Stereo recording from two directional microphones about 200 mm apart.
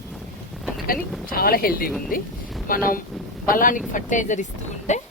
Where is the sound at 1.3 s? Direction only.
50° left (ahead or behind).